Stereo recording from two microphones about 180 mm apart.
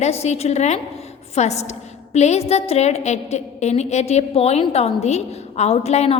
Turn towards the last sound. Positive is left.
turn(degrees=35)  # may be behind; listen again after turning